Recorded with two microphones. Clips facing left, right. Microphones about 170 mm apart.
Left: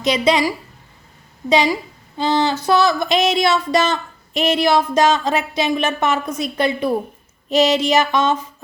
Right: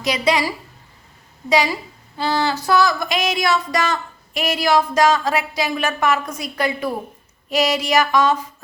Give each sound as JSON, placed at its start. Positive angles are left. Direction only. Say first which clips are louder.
{"t": 0.0, "sound": "a woman's voice", "louder": "left 3 dB", "side_deg": 20}